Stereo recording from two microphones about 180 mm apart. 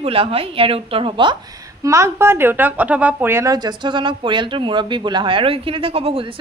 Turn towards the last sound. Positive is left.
turn(degrees=-30)  # may be behind; listen again after turning